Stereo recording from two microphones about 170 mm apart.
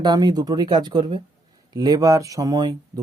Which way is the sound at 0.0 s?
25° right (ahead or behind).